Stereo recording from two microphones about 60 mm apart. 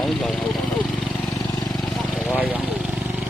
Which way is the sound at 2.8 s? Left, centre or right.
Centre.